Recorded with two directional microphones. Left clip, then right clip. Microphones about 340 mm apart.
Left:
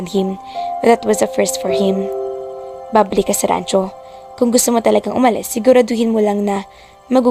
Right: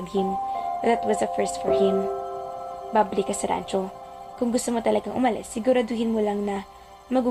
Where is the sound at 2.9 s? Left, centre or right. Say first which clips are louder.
Left 9 dB; left.